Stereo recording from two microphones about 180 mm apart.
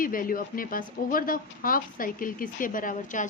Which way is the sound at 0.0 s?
50° left (ahead or behind).